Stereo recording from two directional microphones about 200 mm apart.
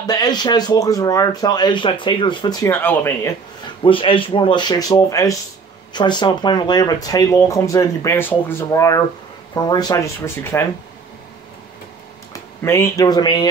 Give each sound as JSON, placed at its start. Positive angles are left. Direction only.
{"t": 0.0, "sound": "speech", "side_deg": 20}
{"t": 2.7, "sound": "speech", "side_deg": 10}
{"t": 12.3, "sound": "speech", "side_deg": 15}